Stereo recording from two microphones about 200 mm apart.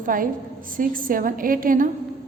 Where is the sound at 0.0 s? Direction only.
45° right (ahead or behind).